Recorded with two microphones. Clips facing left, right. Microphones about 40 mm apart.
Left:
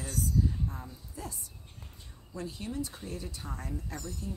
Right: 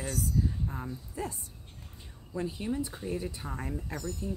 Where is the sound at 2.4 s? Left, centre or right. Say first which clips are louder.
Right 4 dB; centre.